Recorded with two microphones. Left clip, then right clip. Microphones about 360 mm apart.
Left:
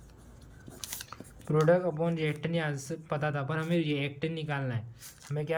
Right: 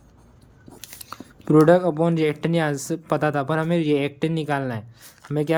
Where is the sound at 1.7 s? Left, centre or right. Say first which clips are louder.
Right 9 dB; centre.